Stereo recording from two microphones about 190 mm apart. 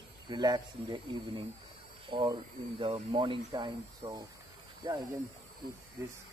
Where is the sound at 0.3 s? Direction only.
20° right (ahead or behind).